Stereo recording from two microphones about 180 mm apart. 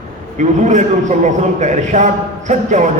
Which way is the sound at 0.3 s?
45° right (ahead or behind).